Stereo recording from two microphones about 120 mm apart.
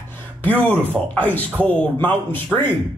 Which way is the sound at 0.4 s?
15° left (ahead or behind).